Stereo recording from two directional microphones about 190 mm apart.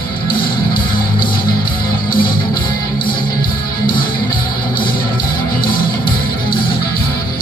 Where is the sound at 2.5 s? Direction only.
25° left (ahead or behind).